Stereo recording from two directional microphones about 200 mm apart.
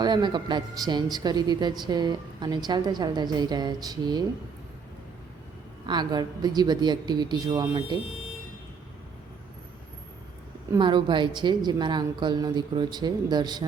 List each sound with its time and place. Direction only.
0.0 s a woman's voice: 20° right (ahead or behind)
5.8 s a woman's voice: 20° right (ahead or behind)
10.7 s a woman's voice: 25° right (ahead or behind)